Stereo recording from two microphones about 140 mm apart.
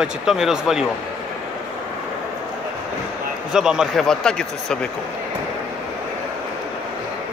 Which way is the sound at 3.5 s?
5° right (ahead or behind).